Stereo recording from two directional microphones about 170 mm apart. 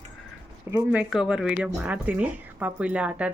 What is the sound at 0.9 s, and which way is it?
A woman's voice, 5° right (ahead or behind).